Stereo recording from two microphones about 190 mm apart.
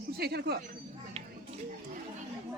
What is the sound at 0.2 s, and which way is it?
Speech, 60° right (ahead or behind).